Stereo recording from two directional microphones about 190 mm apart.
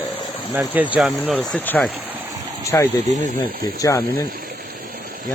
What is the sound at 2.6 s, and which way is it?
Speech, 15° left (ahead or behind).